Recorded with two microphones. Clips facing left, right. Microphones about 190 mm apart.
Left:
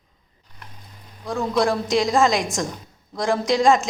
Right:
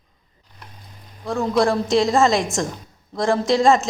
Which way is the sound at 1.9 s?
30° right (ahead or behind).